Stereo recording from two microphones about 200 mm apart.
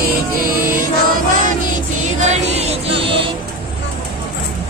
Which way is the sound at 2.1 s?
35° right (ahead or behind).